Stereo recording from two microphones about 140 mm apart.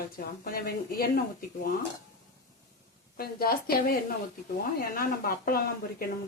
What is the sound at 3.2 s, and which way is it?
Speech, 90° left.